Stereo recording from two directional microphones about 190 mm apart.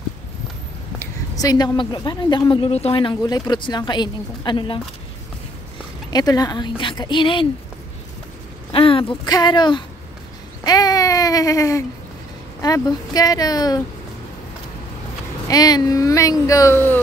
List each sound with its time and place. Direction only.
0.9 s a woman's voice: 20° left (ahead or behind)
6.0 s a woman's voice: 20° left (ahead or behind)
8.7 s a woman's voice: 30° left (ahead or behind)
10.6 s a sound: 20° left (ahead or behind)
12.6 s a woman's voice: 20° left (ahead or behind)
15.4 s speech: 20° left (ahead or behind)